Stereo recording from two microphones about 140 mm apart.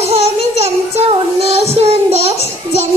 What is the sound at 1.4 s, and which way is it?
Child singing, 50° right (ahead or behind).